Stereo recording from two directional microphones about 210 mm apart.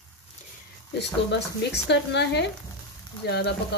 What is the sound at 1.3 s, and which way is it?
Speech, 55° left (ahead or behind).